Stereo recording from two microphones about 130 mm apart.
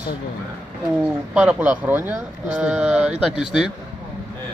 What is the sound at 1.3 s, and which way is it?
Speech, 10° right (ahead or behind).